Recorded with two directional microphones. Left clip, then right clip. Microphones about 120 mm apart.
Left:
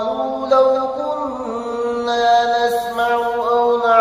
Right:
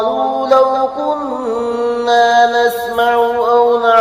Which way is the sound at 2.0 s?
40° right (ahead or behind).